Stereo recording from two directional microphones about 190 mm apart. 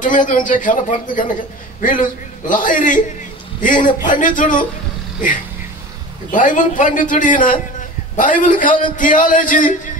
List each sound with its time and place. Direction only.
0.0 s a man's voice: 45° left (ahead or behind)
6.3 s a man's voice: 40° left (ahead or behind)